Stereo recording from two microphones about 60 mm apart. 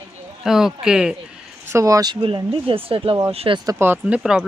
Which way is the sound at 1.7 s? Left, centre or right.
Right.